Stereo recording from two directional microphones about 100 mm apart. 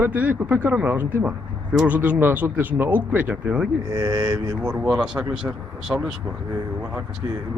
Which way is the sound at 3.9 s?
45° right (ahead or behind).